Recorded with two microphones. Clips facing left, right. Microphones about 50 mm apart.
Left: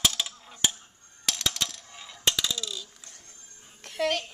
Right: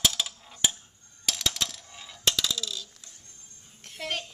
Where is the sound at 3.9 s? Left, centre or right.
Left.